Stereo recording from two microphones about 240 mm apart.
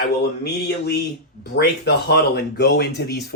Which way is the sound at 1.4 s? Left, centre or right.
Left.